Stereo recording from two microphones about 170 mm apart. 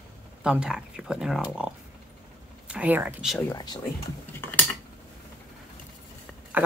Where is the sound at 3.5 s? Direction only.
25° left (ahead or behind).